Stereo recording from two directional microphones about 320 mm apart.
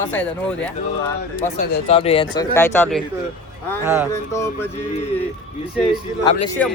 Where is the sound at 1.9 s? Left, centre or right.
Centre.